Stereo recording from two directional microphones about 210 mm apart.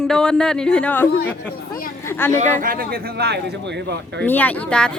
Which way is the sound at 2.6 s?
45° right (ahead or behind).